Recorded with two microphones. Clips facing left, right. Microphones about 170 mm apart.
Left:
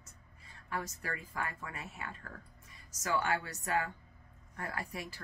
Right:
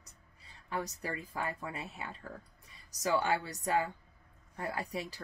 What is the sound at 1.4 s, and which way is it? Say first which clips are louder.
Speech: right 4 dB; 25° right (ahead or behind).